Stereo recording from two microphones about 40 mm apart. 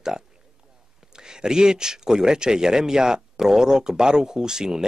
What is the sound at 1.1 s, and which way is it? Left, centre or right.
Speech, centre.